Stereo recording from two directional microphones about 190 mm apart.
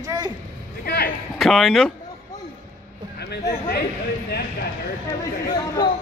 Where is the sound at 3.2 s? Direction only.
60° left (ahead or behind).